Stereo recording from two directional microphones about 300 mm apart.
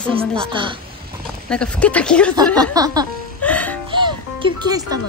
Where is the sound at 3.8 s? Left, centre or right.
Centre.